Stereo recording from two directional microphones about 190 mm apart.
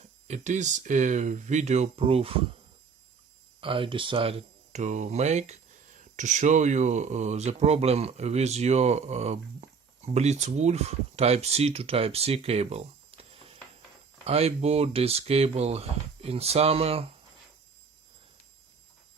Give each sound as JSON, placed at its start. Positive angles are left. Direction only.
{"t": 0.0, "sound": "speech", "side_deg": -40}
{"t": 3.6, "sound": "speech", "side_deg": -25}